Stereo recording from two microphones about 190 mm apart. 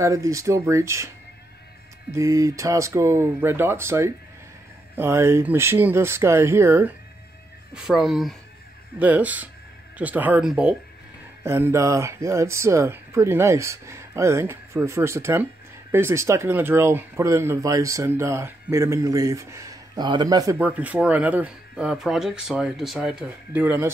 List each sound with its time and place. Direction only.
0.0 s speech: 15° right (ahead or behind)
2.1 s speech: 15° right (ahead or behind)